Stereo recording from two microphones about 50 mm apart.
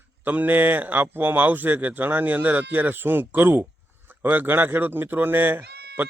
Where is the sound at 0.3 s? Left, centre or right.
Right.